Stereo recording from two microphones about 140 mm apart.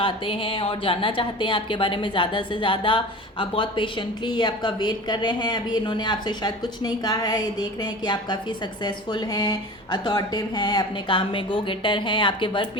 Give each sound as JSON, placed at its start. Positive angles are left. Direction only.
{"t": 0.0, "sound": "speech", "side_deg": 40}